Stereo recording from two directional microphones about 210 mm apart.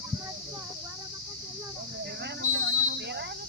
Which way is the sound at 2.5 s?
55° right (ahead or behind).